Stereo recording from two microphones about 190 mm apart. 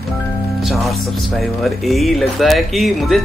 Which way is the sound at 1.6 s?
Centre (ahead or behind).